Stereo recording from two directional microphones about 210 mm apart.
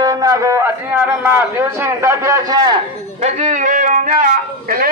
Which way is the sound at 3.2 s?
35° right (ahead or behind).